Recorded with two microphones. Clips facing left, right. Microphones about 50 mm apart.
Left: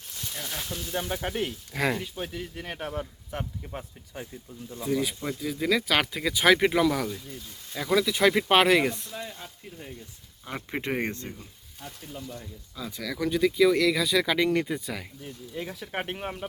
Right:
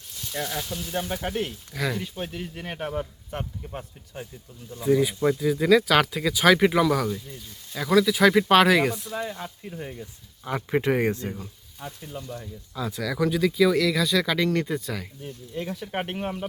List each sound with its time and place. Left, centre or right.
0.9 s speech: centre
1.7 s speech: left
2.1 s speech: centre
9.1 s speech: right
10.4 s speech: centre
11.1 s speech: right
12.7 s speech: centre